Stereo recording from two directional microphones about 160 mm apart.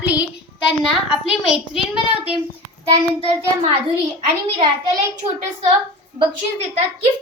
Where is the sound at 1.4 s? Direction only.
5° right (ahead or behind).